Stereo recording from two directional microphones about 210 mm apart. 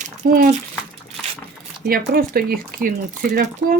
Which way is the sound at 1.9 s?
45° right (ahead or behind).